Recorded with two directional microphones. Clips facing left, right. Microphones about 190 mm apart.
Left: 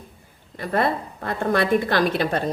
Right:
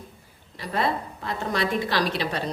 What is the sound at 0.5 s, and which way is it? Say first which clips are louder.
A woman's voice: left 4 dB; 55° left (ahead or behind).